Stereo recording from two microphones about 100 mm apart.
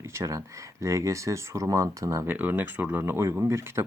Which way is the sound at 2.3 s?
20° right (ahead or behind).